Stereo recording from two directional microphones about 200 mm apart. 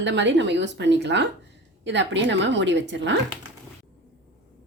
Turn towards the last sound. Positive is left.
turn(degrees=-65)  # may be behind; listen again after turning